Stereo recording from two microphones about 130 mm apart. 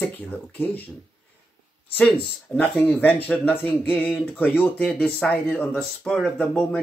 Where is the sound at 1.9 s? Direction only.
5° left (ahead or behind).